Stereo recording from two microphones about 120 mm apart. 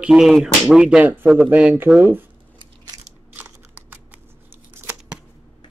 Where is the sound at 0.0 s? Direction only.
5° right (ahead or behind).